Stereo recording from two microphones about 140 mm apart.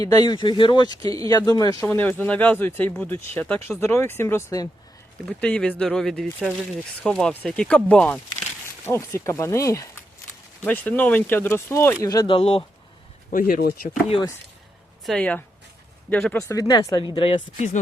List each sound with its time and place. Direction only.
0.0 s speech: 30° left (ahead or behind)
1.9 s speech: 15° left (ahead or behind)
5.2 s speech: 5° left (ahead or behind)
8.8 s speech: 20° left (ahead or behind)
10.7 s speech: 10° left (ahead or behind)
12.0 s speech: 25° left (ahead or behind)
12.3 s speech: 45° left (ahead or behind)
13.3 s speech: 90° left
15.0 s speech: 5° left (ahead or behind)
16.6 s speech: 30° left (ahead or behind)